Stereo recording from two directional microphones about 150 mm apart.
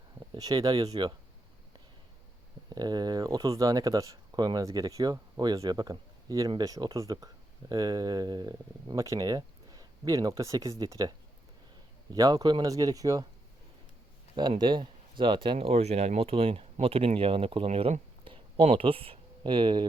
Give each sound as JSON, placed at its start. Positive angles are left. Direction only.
{"t": 0.3, "sound": "speech", "side_deg": -25}
{"t": 2.6, "sound": "speech", "side_deg": -25}
{"t": 12.1, "sound": "speech", "side_deg": -25}
{"t": 14.6, "sound": "speech", "side_deg": -30}